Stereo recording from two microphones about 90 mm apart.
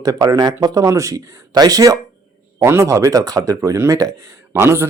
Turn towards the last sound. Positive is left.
turn(degrees=-25)  # may be behind; listen again after turning